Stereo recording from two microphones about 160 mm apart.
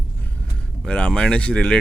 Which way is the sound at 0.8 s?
5° left (ahead or behind).